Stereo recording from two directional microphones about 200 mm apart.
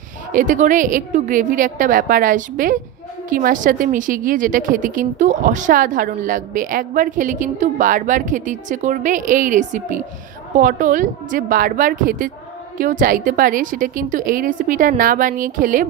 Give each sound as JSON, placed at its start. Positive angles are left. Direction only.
{"t": 0.3, "sound": "a woman's voice", "side_deg": -40}